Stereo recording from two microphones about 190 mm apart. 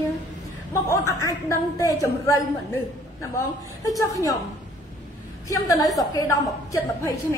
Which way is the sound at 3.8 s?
15° left (ahead or behind).